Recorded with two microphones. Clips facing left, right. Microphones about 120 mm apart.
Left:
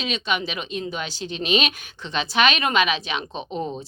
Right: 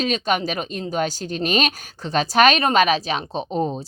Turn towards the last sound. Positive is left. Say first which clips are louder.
# right 5 dB
turn(degrees=-30)  # may be behind; listen again after turning